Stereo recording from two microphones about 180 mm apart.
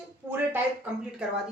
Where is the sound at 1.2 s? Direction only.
5° right (ahead or behind).